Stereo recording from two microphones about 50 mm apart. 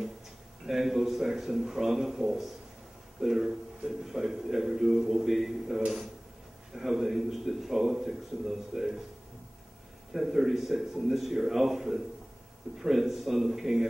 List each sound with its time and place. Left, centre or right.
0.7 s a man's voice: centre
10.1 s a man's voice: centre